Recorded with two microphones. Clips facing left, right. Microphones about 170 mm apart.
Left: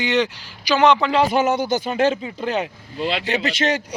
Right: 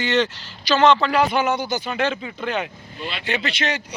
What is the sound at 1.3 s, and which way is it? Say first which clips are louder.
Speech: left 3 dB; 40° left (ahead or behind).